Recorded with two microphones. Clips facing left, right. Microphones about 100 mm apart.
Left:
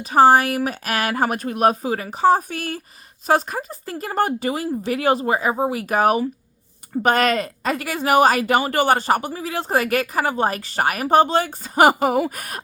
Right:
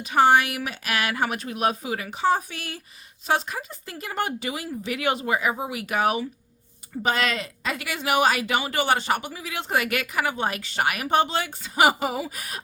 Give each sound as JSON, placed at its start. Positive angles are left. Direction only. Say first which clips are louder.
{"t": 0.0, "sound": "speech", "louder": "left 5 dB", "side_deg": 40}